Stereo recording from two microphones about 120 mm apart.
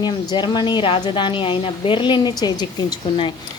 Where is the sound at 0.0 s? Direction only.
40° left (ahead or behind).